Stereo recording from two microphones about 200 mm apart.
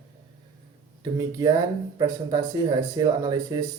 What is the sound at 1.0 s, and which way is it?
Speech, 15° right (ahead or behind).